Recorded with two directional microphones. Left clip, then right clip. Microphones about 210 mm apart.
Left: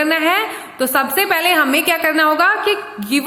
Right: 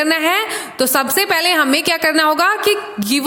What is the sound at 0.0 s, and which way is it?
A woman's voice, 55° right (ahead or behind).